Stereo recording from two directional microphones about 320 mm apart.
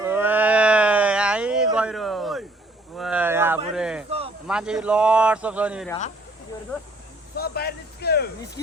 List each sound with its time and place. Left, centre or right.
0.0 s a sound: centre
4.4 s speech: centre
7.3 s speech: left